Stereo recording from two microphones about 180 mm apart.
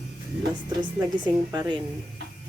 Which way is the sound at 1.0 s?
20° right (ahead or behind).